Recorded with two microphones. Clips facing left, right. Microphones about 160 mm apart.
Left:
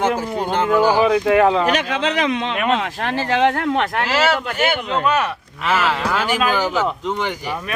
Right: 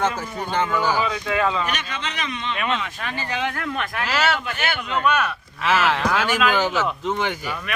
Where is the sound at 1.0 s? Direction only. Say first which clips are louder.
Left 9 dB; 55° left (ahead or behind); by 4.0 s 75° left (ahead or behind).